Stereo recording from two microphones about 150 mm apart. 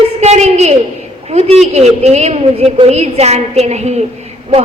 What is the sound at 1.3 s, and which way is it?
A woman's voice, 45° right (ahead or behind).